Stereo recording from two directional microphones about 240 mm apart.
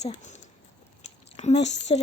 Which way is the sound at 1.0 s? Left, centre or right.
Left.